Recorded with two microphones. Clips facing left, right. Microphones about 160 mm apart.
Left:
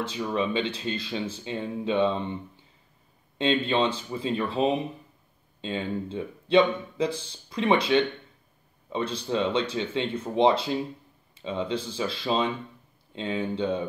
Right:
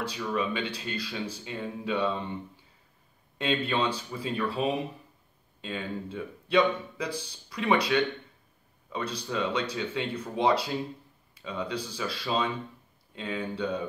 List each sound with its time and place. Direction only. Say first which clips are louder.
0.0 s speech: left 3 dB; 25° left (ahead or behind)
3.3 s speech: left 4 dB; 25° left (ahead or behind)